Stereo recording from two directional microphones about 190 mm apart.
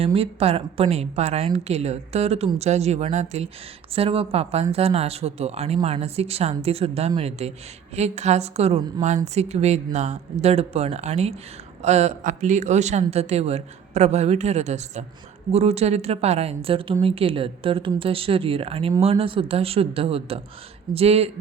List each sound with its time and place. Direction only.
0.0 s a woman's voice: 30° right (ahead or behind)